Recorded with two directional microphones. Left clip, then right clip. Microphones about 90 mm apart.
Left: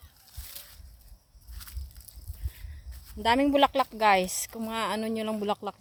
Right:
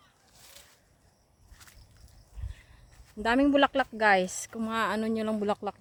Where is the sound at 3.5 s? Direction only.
35° right (ahead or behind).